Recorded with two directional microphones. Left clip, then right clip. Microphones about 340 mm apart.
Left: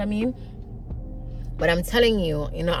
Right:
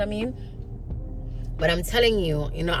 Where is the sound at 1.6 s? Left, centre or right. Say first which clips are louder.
Left 1 dB; centre.